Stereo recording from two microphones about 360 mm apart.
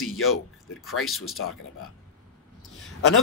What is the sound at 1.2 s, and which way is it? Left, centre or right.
Speech, left.